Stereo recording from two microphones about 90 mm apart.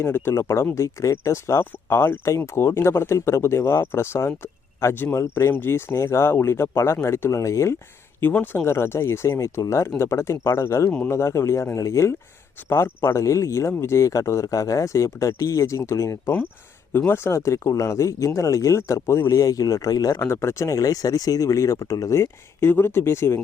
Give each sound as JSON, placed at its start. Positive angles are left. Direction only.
{"t": 0.0, "sound": "a man's voice", "side_deg": 25}
{"t": 8.2, "sound": "speech", "side_deg": 20}
{"t": 10.8, "sound": "speech", "side_deg": 10}
{"t": 11.1, "sound": "speech", "side_deg": 30}
{"t": 20.1, "sound": "speech", "side_deg": 30}